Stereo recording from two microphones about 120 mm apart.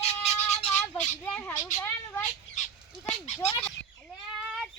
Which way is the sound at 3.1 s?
60° left (ahead or behind).